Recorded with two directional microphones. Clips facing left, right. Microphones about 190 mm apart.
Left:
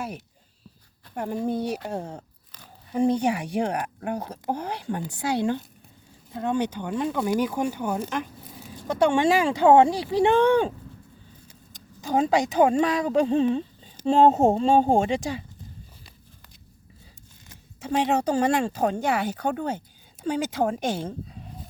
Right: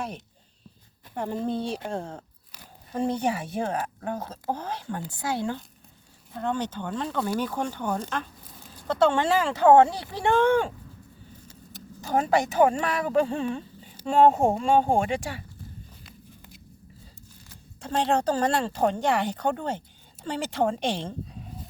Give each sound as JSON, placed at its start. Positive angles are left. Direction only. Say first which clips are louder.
{"t": 1.1, "sound": "speech", "louder": "left 1 dB", "side_deg": 10}
{"t": 17.7, "sound": "speech", "louder": "left 1 dB", "side_deg": 10}